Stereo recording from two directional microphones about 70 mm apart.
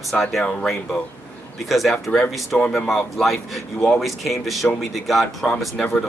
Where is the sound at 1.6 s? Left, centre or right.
Centre.